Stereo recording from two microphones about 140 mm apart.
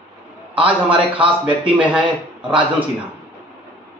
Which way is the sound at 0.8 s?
40° right (ahead or behind).